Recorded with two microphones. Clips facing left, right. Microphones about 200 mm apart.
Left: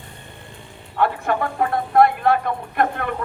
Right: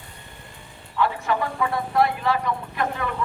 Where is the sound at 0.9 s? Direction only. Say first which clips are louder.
Left 3 dB; 55° left (ahead or behind).